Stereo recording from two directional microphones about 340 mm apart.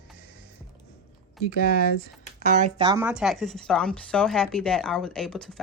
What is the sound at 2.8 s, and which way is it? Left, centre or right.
Speech, centre.